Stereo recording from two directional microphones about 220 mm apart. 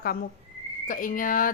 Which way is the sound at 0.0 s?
40° left (ahead or behind).